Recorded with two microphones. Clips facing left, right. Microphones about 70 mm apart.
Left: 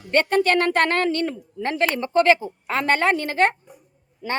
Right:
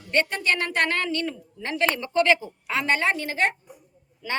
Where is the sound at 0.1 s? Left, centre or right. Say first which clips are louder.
Left 6 dB; left.